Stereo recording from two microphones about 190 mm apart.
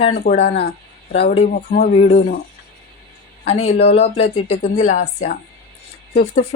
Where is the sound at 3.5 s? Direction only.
35° left (ahead or behind).